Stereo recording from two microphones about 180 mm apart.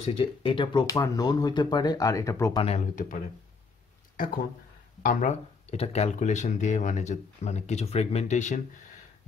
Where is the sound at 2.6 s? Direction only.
40° left (ahead or behind).